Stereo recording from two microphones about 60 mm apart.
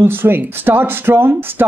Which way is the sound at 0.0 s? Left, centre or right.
Right.